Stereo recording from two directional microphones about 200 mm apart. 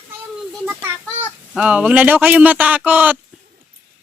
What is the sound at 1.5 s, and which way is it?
Speech, 5° right (ahead or behind).